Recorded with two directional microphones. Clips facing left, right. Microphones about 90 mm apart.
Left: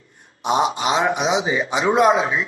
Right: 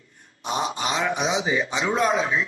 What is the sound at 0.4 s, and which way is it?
Speech, 35° left (ahead or behind).